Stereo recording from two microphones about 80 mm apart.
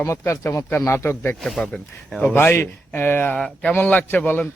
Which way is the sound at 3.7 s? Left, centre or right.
Left.